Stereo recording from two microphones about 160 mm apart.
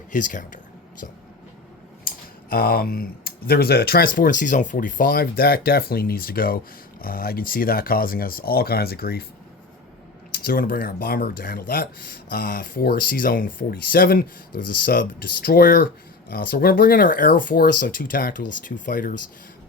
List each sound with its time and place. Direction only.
0.1 s speech: 55° left (ahead or behind)
2.0 s speech: 70° left (ahead or behind)
10.3 s speech: 65° left (ahead or behind)